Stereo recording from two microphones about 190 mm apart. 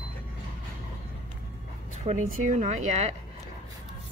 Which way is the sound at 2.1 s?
40° right (ahead or behind).